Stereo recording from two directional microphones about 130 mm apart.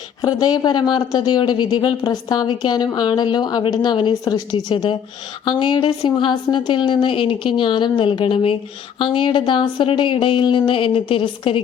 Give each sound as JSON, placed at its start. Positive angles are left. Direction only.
{"t": 0.2, "sound": "speech", "side_deg": 30}